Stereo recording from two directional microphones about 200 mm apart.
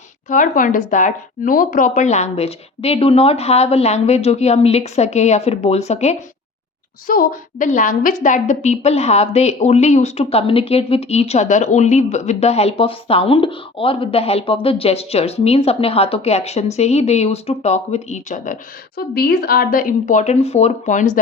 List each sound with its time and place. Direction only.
0.3 s a woman's voice: 40° left (ahead or behind)
18.9 s a woman's voice: 50° left (ahead or behind)